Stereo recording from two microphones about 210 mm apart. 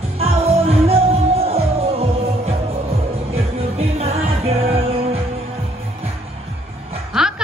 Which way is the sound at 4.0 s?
30° right (ahead or behind).